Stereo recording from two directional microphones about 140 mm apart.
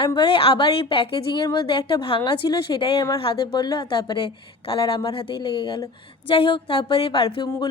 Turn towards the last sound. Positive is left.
turn(degrees=40)  # may be behind; listen again after turning